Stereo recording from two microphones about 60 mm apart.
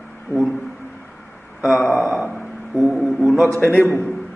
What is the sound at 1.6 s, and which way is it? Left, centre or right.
A man's voice, centre.